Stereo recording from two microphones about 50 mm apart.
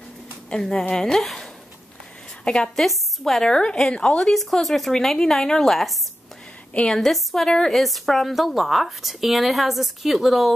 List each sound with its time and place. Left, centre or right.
0.5 s a woman's voice: centre
2.4 s a woman's voice: centre
2.7 s a woman's voice: centre; by 4.2 s left
4.2 s a woman's voice: centre